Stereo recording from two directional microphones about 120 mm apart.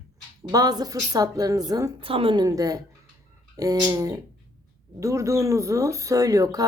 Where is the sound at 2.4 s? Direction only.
30° right (ahead or behind).